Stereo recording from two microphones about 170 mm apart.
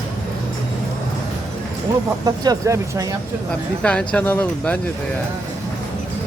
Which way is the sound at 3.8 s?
5° left (ahead or behind).